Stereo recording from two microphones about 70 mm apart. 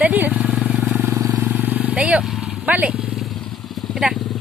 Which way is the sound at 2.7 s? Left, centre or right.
Right.